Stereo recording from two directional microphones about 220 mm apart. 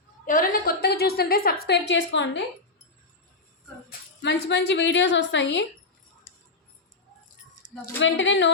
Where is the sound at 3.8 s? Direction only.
50° left (ahead or behind).